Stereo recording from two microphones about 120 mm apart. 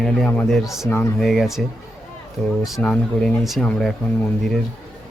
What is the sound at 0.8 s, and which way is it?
Speech, 25° left (ahead or behind).